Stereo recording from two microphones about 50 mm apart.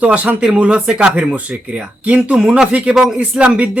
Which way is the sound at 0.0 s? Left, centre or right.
Right.